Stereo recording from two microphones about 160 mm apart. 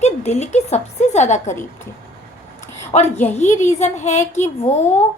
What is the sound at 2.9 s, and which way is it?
A woman's voice, 40° left (ahead or behind).